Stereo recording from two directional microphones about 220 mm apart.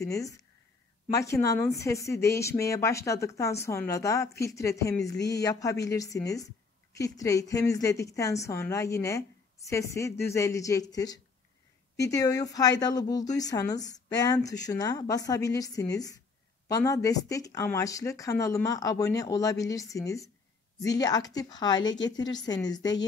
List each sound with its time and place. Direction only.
0.0 s a woman's voice: 15° left (ahead or behind)